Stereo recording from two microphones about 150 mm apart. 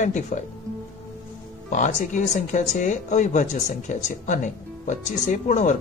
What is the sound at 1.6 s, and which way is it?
Speech, 55° left (ahead or behind).